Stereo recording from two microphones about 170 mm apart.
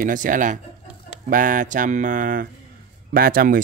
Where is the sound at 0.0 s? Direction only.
50° right (ahead or behind).